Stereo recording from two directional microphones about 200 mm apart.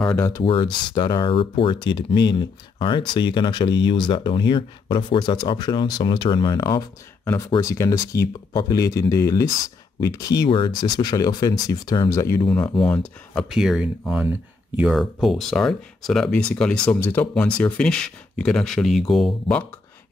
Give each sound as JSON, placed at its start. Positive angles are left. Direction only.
{"t": 0.1, "sound": "speech", "side_deg": 15}
{"t": 0.4, "sound": "speech", "side_deg": 25}